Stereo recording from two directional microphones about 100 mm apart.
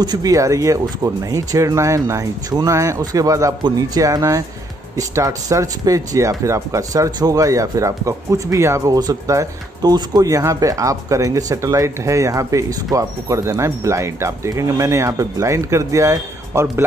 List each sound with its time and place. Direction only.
0.0 s speech: 40° right (ahead or behind)